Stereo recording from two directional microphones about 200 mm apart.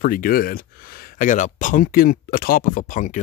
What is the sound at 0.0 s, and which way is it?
Speech, 45° left (ahead or behind).